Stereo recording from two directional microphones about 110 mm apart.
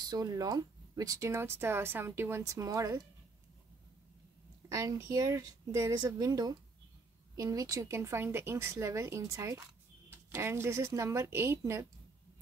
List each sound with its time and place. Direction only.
0.0 s speech: 35° right (ahead or behind)
4.6 s speech: 30° right (ahead or behind)